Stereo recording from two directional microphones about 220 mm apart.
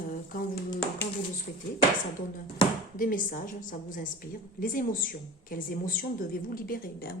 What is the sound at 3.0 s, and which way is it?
A woman's voice, 40° left (ahead or behind).